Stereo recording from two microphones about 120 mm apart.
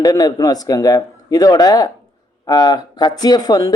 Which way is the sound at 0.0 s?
35° left (ahead or behind).